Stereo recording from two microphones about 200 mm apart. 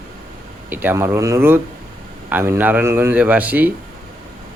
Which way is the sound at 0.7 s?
10° right (ahead or behind).